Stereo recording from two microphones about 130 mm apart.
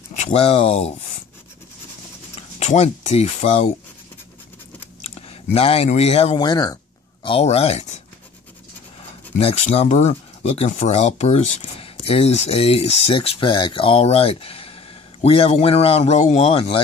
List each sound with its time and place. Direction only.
0.1 s speech: 55° left (ahead or behind)
2.6 s speech: 55° left (ahead or behind)
5.0 s speech: 50° left (ahead or behind)
6.4 s speech: 30° left (ahead or behind)
7.2 s speech: 50° left (ahead or behind)
9.4 s speech: 50° left (ahead or behind)